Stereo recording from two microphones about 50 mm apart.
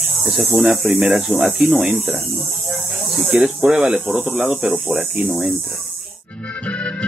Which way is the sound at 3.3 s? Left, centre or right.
Centre.